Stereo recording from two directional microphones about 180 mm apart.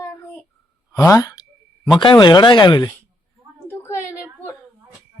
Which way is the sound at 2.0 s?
25° left (ahead or behind).